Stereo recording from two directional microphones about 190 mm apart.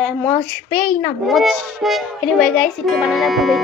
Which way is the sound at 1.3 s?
Centre (ahead or behind).